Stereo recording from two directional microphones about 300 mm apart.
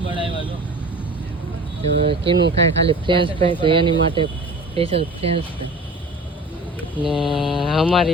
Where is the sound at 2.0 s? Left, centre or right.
Centre.